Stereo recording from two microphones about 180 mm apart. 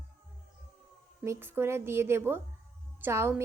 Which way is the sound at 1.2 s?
15° right (ahead or behind).